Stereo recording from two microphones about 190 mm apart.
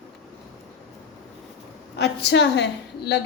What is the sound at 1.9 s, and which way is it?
A woman's voice, 60° left (ahead or behind).